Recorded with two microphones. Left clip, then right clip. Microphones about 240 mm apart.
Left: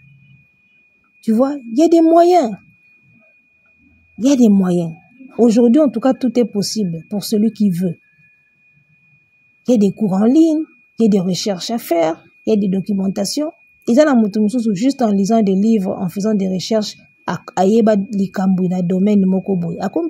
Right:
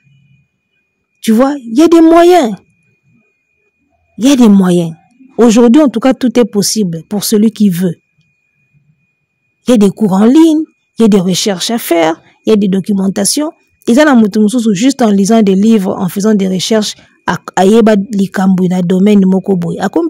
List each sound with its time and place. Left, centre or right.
1.2 s speech: right
4.2 s speech: right
9.7 s speech: right